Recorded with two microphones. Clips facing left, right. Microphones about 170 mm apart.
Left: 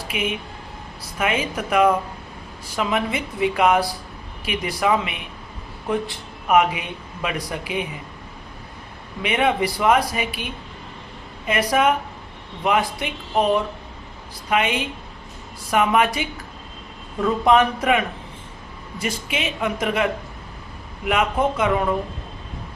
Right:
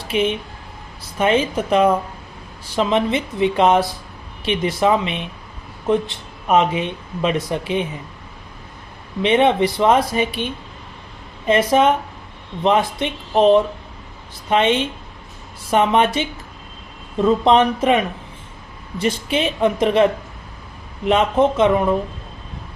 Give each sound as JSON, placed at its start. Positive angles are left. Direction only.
{"t": 0.1, "sound": "speech", "side_deg": -30}
{"t": 9.2, "sound": "speech", "side_deg": -25}